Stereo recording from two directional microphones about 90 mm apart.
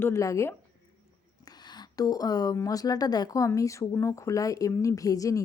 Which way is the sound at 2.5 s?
40° left (ahead or behind).